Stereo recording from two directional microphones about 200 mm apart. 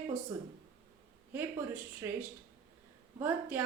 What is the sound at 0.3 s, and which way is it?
A woman's voice, 10° right (ahead or behind).